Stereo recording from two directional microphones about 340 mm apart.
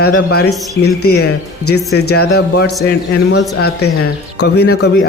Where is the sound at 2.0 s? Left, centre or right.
Left.